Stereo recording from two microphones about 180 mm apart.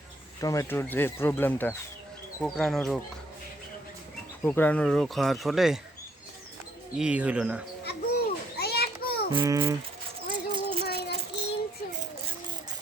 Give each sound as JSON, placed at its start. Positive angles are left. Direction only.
{"t": 0.4, "sound": "speech", "side_deg": 20}
{"t": 4.4, "sound": "speech", "side_deg": 10}
{"t": 7.0, "sound": "speech", "side_deg": -5}
{"t": 7.9, "sound": "children playing", "side_deg": 60}
{"t": 9.3, "sound": "a child's voice", "side_deg": -25}
{"t": 10.3, "sound": "a sound", "side_deg": -25}
{"t": 10.8, "sound": "child singing", "side_deg": 65}